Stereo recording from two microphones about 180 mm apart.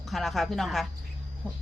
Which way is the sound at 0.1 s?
Centre (ahead or behind).